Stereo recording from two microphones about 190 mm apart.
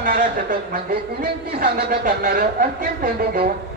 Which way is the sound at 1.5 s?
55° right (ahead or behind).